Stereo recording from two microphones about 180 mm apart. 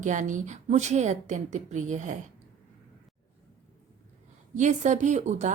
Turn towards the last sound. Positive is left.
turn(degrees=-40)  # may be behind; listen again after turning